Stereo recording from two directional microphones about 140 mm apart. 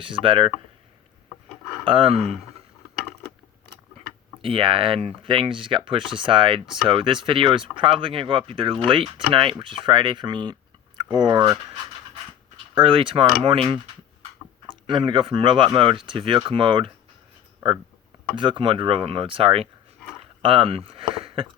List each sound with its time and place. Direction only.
0.0 s speech: 40° right (ahead or behind)
1.8 s speech: 40° right (ahead or behind)
4.4 s speech: 40° right (ahead or behind)
12.7 s speech: 40° right (ahead or behind)
14.8 s speech: 35° right (ahead or behind)
18.3 s speech: 35° right (ahead or behind)
21.1 s a sound: 40° right (ahead or behind)